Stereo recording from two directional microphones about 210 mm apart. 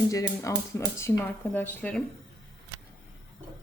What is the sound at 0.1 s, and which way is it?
Speech, 15° left (ahead or behind).